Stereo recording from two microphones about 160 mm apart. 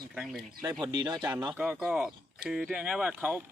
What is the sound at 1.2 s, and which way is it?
Speech, 5° right (ahead or behind).